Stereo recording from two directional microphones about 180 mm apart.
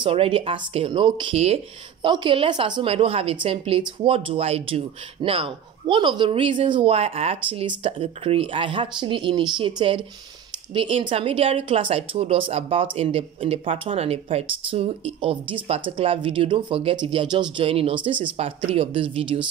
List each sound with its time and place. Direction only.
0.0 s speech: 30° right (ahead or behind)